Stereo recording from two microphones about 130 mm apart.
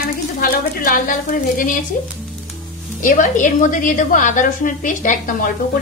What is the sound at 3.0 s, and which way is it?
A woman's voice, 85° left.